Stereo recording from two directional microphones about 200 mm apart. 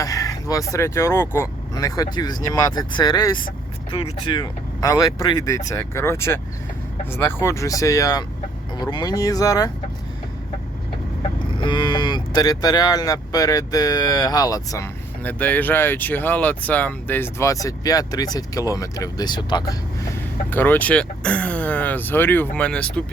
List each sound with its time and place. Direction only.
0.0 s speech: 15° left (ahead or behind)
3.9 s cattle: 25° left (ahead or behind)
8.8 s speech: 20° left (ahead or behind)
11.5 s cattle: 25° left (ahead or behind)
20.5 s cattle: 10° left (ahead or behind)